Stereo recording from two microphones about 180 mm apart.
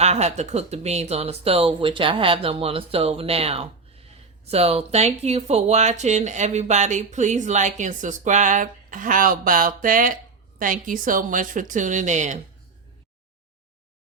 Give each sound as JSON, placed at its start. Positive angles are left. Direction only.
{"t": 0.0, "sound": "speech", "side_deg": -35}